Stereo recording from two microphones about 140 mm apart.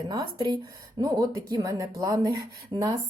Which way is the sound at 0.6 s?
30° right (ahead or behind).